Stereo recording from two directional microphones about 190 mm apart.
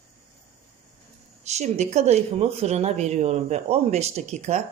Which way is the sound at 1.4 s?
35° right (ahead or behind).